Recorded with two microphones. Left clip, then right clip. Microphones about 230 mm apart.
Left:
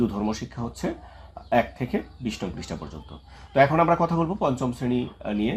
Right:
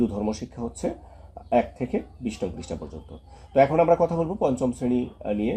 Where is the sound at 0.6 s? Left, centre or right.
Left.